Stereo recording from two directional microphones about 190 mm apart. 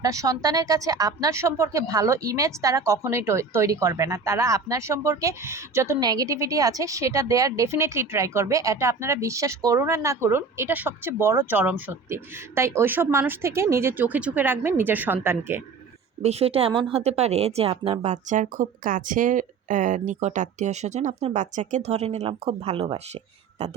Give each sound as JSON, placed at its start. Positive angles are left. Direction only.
{"t": 0.0, "sound": "a woman's voice", "side_deg": -20}
{"t": 16.2, "sound": "speech", "side_deg": -30}